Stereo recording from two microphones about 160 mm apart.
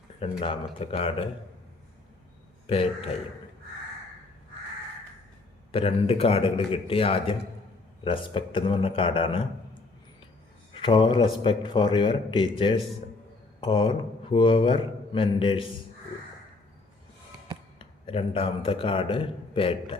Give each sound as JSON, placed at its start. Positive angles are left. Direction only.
{"t": 0.2, "sound": "a man's voice", "side_deg": 35}
{"t": 2.6, "sound": "a man's voice", "side_deg": 35}
{"t": 5.7, "sound": "a man's voice", "side_deg": 35}
{"t": 10.8, "sound": "a man's voice", "side_deg": 30}
{"t": 17.7, "sound": "a man's voice", "side_deg": 35}